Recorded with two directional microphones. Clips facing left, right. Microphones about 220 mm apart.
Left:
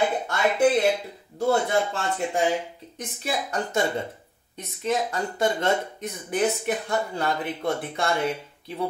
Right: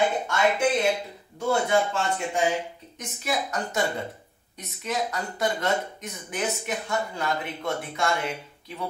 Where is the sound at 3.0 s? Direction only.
30° left (ahead or behind).